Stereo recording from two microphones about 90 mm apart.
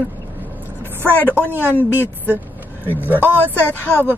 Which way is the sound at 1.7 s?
20° left (ahead or behind).